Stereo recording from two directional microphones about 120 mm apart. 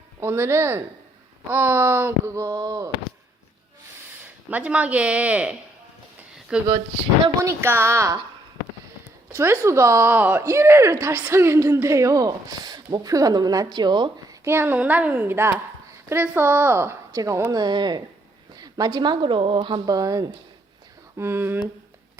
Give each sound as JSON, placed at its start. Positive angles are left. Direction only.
{"t": 0.2, "sound": "a woman's voice", "side_deg": -20}
{"t": 4.4, "sound": "a woman's voice", "side_deg": -10}
{"t": 7.3, "sound": "a woman's voice", "side_deg": -20}
{"t": 9.3, "sound": "a woman's voice", "side_deg": -20}
{"t": 14.4, "sound": "a woman's voice", "side_deg": -20}
{"t": 21.2, "sound": "a woman's voice", "side_deg": -20}